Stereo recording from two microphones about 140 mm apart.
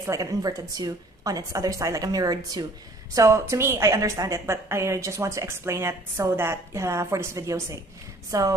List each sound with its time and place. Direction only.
0.0 s a woman's voice: 25° right (ahead or behind)